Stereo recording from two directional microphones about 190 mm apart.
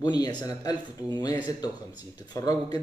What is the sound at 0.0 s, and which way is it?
A man's voice, 20° left (ahead or behind).